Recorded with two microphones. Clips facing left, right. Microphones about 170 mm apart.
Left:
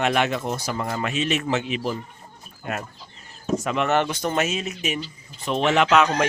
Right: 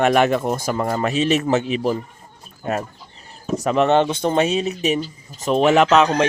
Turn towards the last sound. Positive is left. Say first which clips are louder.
# right 4 dB
turn(degrees=-30)  # may be behind; listen again after turning